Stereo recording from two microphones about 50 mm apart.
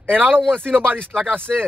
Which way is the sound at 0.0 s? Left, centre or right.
Right.